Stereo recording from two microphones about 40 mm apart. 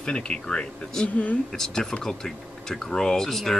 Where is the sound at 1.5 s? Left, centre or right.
Centre.